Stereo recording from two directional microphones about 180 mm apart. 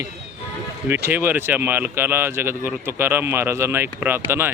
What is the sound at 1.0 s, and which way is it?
Speech, 10° right (ahead or behind).